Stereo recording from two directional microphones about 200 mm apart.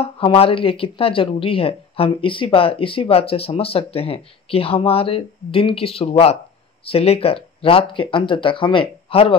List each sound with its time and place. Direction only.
0.0 s speech: 30° left (ahead or behind)